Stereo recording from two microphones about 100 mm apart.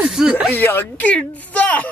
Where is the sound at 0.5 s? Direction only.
20° left (ahead or behind).